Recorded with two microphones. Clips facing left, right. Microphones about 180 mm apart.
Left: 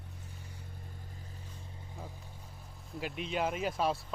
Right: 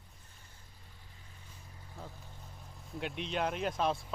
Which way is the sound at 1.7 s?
15° left (ahead or behind).